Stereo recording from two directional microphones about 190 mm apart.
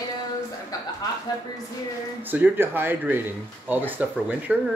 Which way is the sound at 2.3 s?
10° right (ahead or behind).